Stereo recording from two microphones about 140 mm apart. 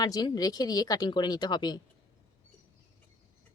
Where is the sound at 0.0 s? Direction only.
30° left (ahead or behind).